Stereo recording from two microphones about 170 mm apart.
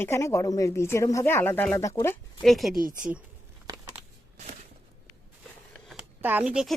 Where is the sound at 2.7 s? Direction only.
55° right (ahead or behind).